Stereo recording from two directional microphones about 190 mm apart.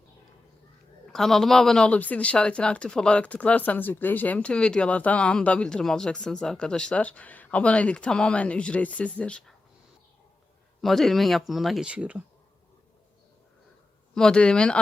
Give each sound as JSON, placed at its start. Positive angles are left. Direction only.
{"t": 1.0, "sound": "speech", "side_deg": 0}
{"t": 10.8, "sound": "speech", "side_deg": 0}
{"t": 14.2, "sound": "speech", "side_deg": 5}